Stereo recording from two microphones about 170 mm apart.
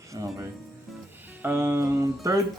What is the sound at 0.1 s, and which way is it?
Speech, 20° right (ahead or behind).